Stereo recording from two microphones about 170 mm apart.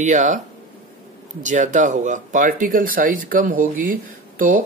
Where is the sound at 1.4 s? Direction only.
45° right (ahead or behind).